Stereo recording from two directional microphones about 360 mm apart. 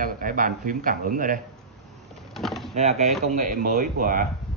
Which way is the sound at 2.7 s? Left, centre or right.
Centre.